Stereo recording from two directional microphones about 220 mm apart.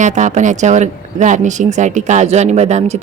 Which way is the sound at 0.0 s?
35° right (ahead or behind).